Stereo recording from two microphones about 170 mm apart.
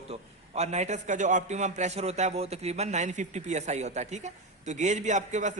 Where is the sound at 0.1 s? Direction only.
40° right (ahead or behind).